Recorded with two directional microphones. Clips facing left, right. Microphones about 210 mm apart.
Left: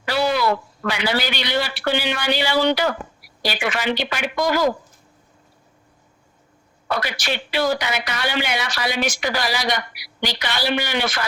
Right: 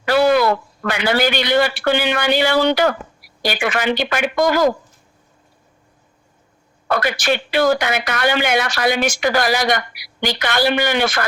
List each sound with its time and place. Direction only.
0.0 s a man's voice: 50° right (ahead or behind)
6.8 s a woman's voice: 50° right (ahead or behind)